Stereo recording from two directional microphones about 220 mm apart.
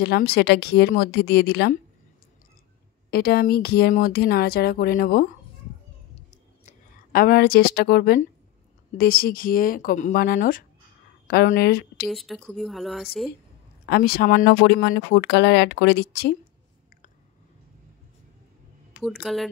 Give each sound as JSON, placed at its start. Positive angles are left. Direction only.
{"t": 0.0, "sound": "speech", "side_deg": 45}
{"t": 3.1, "sound": "speech", "side_deg": 45}
{"t": 6.1, "sound": "a sound", "side_deg": 35}
{"t": 8.9, "sound": "speech", "side_deg": 45}
{"t": 12.1, "sound": "speech", "side_deg": 0}
{"t": 13.8, "sound": "speech", "side_deg": 45}
{"t": 19.0, "sound": "speech", "side_deg": 0}